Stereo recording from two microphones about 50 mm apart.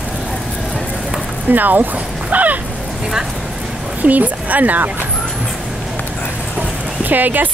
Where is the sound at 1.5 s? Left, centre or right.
Right.